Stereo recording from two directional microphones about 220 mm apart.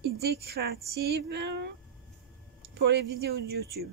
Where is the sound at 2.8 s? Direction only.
50° right (ahead or behind).